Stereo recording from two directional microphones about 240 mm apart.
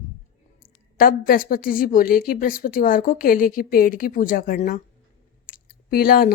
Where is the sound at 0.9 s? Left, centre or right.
Left.